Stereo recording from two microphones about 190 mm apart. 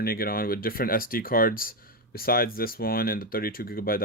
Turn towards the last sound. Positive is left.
turn(degrees=50)  # may be behind; listen again after turning